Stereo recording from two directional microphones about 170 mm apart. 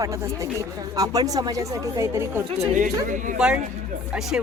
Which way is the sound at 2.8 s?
50° right (ahead or behind).